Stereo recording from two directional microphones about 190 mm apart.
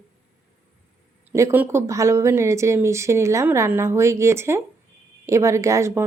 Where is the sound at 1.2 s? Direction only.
10° right (ahead or behind).